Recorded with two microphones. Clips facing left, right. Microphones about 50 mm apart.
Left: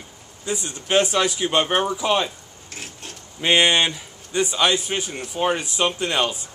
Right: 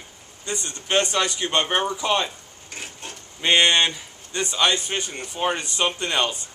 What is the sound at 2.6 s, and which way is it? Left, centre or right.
Wood, centre.